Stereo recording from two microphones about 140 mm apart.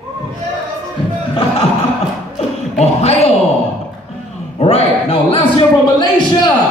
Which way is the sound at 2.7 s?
50° left (ahead or behind).